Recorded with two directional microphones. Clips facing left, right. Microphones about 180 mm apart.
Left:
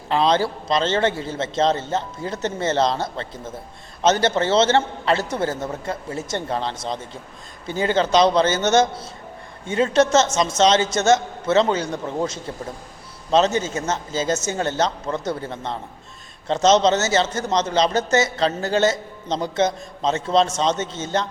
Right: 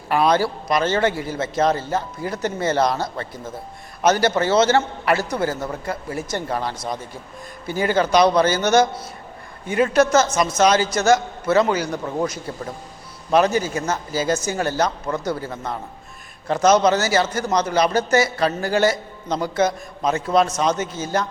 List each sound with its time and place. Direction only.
0.1 s a man's voice: 25° left (ahead or behind)